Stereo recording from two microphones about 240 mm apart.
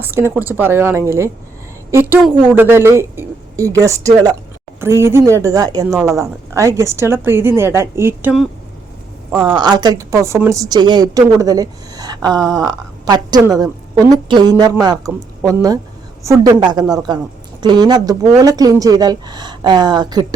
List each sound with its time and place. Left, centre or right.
0.0 s a woman's voice: centre